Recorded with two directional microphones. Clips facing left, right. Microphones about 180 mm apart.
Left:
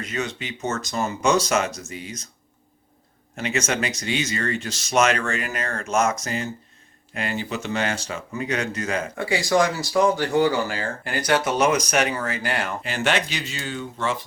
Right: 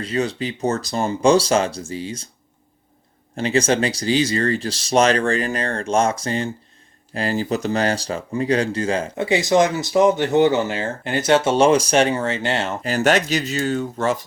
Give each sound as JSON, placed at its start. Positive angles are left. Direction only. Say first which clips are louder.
{"t": 0.0, "sound": "speech", "louder": "right 6 dB", "side_deg": -30}
{"t": 3.3, "sound": "speech", "louder": "right 7 dB", "side_deg": -30}
{"t": 12.8, "sound": "speech", "louder": "right 8 dB", "side_deg": -40}